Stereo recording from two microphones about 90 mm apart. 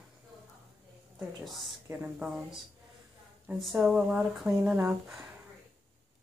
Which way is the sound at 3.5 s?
30° right (ahead or behind).